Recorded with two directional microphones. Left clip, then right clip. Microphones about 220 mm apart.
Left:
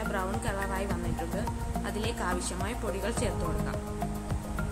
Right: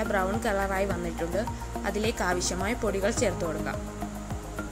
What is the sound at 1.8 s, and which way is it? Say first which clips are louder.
A woman's voice: right 6 dB; 20° right (ahead or behind).